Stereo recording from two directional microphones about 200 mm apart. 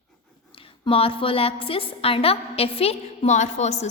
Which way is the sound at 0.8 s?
25° left (ahead or behind).